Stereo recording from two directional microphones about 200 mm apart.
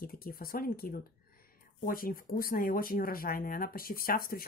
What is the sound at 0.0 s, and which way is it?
Speech, 50° left (ahead or behind).